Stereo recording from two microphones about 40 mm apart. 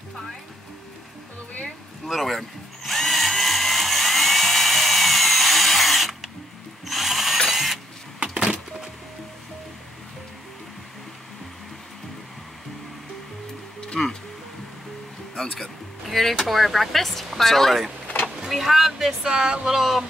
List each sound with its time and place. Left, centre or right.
2.0 s drill: centre
6.9 s ratchet: centre
8.2 s a sound: right
14.0 s music: centre
15.6 s a sound: centre
17.4 s speech: centre
18.5 s vehicle: centre
19.2 s speech: centre
19.7 s speech: centre